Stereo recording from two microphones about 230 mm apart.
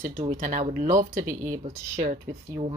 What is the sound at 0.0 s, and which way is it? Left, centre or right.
Speech, right.